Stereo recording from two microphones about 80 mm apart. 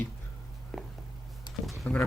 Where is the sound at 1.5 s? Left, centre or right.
Left.